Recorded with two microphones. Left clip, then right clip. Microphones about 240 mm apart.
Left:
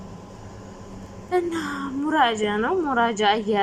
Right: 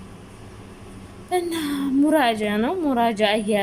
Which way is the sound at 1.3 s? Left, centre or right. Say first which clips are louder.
Even; centre.